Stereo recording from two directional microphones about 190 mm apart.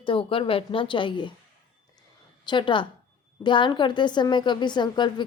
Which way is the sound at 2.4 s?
25° left (ahead or behind).